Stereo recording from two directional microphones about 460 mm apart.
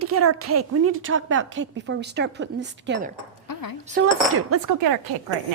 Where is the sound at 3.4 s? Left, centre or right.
Left.